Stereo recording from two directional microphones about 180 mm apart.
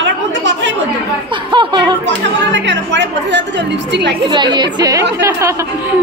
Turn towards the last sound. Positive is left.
turn(degrees=-20)  # may be behind; listen again after turning